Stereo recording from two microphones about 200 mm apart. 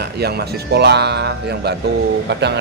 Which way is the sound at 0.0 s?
55° right (ahead or behind).